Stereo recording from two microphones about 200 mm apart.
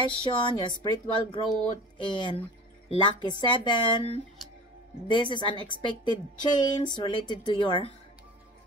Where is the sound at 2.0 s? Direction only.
25° left (ahead or behind).